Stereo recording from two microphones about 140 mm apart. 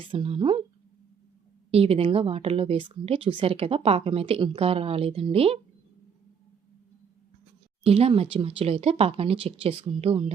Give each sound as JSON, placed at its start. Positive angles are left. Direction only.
{"t": 0.0, "sound": "speech", "side_deg": -40}
{"t": 1.7, "sound": "speech", "side_deg": -45}
{"t": 7.9, "sound": "speech", "side_deg": -45}